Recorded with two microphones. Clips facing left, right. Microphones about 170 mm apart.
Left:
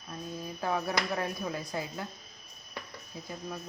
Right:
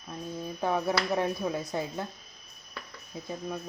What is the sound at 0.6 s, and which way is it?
Finger snapping, 20° right (ahead or behind).